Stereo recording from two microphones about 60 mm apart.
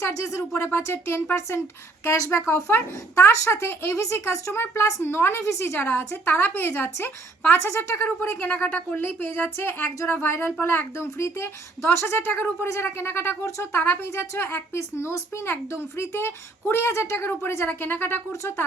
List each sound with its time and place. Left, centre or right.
0.0 s speech: left
0.6 s speech: left
3.9 s speech: left
5.7 s a woman's voice: left
10.0 s speech: left
13.8 s a woman's voice: left